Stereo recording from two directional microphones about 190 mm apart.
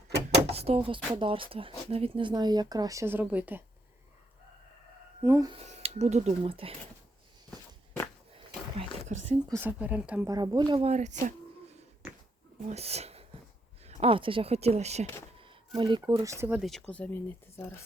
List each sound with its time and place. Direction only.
0.1 s drawer open or close: 60° right (ahead or behind)
0.4 s speech: 30° right (ahead or behind); by 3.6 s 10° right (ahead or behind)
5.2 s speech: 15° right (ahead or behind)
5.6 s speech: 35° right (ahead or behind)
8.3 s a sound: 30° right (ahead or behind)
9.6 s speech: 10° right (ahead or behind)
10.2 s speech: 20° right (ahead or behind)
10.8 s speech: 35° right (ahead or behind)
12.6 s speech: 35° right (ahead or behind); by 16.6 s 15° right (ahead or behind)
16.6 s speech: centre (ahead or behind)